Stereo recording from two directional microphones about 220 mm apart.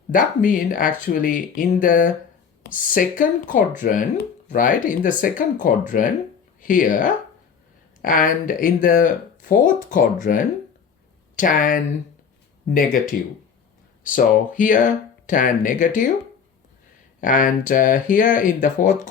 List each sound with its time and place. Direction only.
0.1 s speech: 40° left (ahead or behind)
17.2 s speech: 35° left (ahead or behind)